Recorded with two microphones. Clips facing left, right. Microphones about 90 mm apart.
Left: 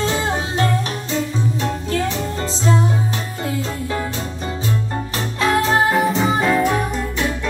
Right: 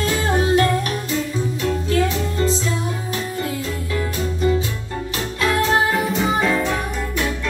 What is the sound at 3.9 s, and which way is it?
Music, 35° left (ahead or behind).